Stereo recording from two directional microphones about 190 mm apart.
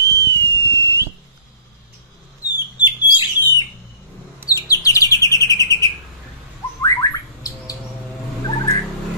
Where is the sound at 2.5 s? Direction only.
20° left (ahead or behind).